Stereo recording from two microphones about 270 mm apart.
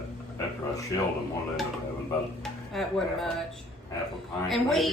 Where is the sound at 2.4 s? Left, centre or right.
Centre.